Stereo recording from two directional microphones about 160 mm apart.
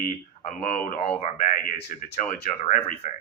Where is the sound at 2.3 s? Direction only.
55° left (ahead or behind).